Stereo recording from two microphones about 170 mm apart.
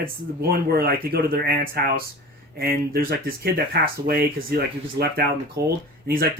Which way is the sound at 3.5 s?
65° right (ahead or behind).